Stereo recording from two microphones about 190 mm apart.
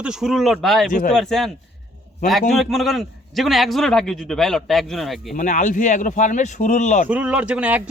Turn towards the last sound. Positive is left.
turn(degrees=-5)  # may be behind; listen again after turning